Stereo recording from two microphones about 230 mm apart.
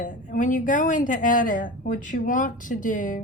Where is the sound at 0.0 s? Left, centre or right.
Left.